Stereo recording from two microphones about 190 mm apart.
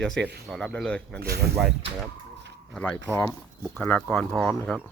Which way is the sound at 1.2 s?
55° right (ahead or behind).